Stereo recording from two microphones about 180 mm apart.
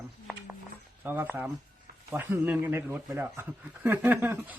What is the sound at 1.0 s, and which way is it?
Speech, 10° right (ahead or behind).